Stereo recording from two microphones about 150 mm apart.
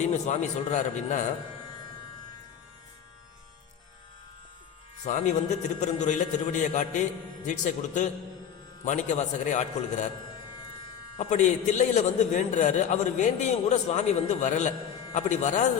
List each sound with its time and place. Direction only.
0.0 s a man's voice: 50° left (ahead or behind)
5.0 s a man's voice: 55° left (ahead or behind)
11.2 s a man's voice: 55° left (ahead or behind)